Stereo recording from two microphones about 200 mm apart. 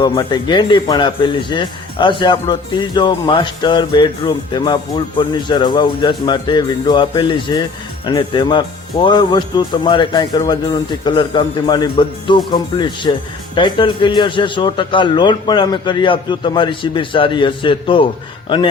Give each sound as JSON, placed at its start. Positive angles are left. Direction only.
{"t": 0.0, "sound": "a man's voice", "side_deg": 20}